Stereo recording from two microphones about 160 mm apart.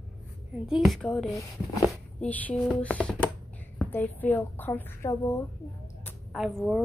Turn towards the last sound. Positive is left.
turn(degrees=0)  # may be behind; listen again after turning